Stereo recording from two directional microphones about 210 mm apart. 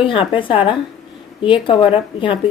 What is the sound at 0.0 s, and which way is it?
A woman's voice, 25° left (ahead or behind).